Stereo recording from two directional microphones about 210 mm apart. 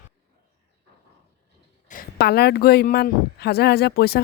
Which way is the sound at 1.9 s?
45° left (ahead or behind).